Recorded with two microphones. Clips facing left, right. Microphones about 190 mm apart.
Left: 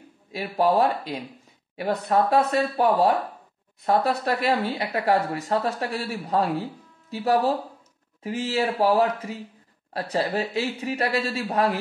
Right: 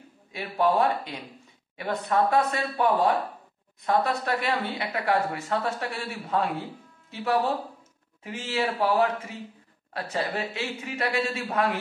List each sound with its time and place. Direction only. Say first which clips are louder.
0.3 s speech: left 2 dB; 35° left (ahead or behind)